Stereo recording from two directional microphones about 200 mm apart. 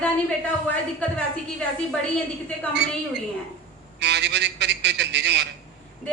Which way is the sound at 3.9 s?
60° right (ahead or behind).